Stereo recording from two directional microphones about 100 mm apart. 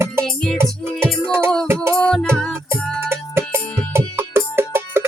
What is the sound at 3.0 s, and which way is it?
Music, 25° right (ahead or behind).